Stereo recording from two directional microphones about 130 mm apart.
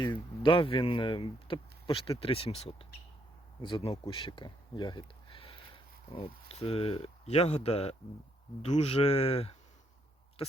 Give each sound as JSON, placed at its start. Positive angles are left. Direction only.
{"t": 0.0, "sound": "speech", "side_deg": 35}
{"t": 3.6, "sound": "speech", "side_deg": 40}